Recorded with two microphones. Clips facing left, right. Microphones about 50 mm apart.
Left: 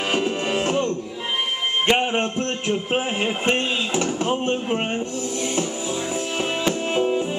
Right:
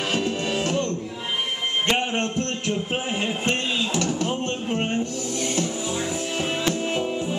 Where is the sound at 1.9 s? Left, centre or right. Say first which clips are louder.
Left 4 dB; centre.